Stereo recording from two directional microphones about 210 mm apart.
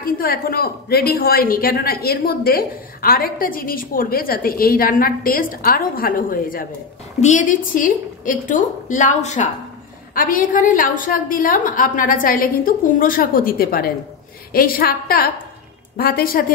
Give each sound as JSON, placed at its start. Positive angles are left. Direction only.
{"t": 0.0, "sound": "a woman's voice", "side_deg": 45}